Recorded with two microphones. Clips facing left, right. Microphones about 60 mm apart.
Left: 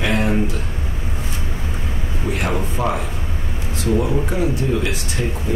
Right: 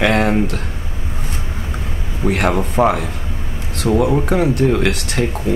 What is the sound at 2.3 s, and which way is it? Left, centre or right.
A man's voice, right.